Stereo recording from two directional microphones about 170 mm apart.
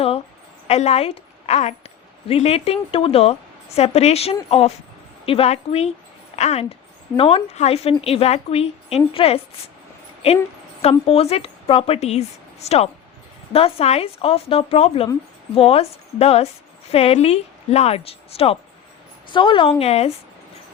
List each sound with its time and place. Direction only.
0.7 s a woman's voice: 35° left (ahead or behind)